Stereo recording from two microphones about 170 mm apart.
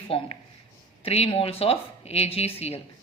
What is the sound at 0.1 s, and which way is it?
Speech, 35° left (ahead or behind).